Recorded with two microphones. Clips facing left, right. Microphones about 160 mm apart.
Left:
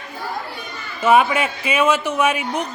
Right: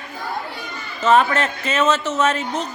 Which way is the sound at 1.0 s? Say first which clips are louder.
Left 1 dB; 10° left (ahead or behind).